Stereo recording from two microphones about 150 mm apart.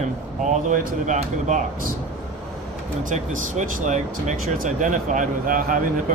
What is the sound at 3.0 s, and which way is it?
Speech, 55° right (ahead or behind).